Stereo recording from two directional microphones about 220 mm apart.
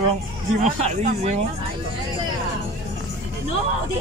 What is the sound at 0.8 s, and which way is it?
Speech, 30° right (ahead or behind).